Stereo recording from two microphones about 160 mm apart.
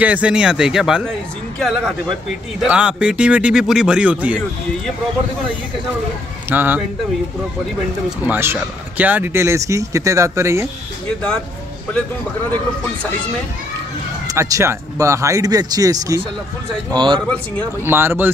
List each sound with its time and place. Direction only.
0.0 s a man's voice: 10° right (ahead or behind)
6.5 s a man's voice: 10° right (ahead or behind)
8.2 s a man's voice: 15° right (ahead or behind)
14.2 s speech: 20° right (ahead or behind)
17.8 s a man's voice: 15° right (ahead or behind)